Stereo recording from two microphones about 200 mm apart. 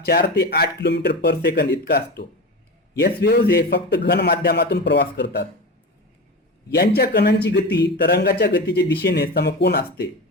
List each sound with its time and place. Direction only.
0.0 s a man's voice: 55° left (ahead or behind)
6.7 s a man's voice: 55° left (ahead or behind)